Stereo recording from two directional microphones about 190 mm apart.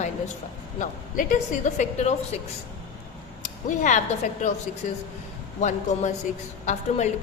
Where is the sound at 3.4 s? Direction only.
40° left (ahead or behind).